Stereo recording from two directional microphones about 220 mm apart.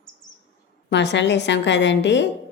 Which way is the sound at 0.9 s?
55° left (ahead or behind).